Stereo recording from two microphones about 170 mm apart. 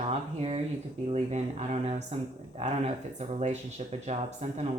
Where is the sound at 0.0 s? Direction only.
35° right (ahead or behind).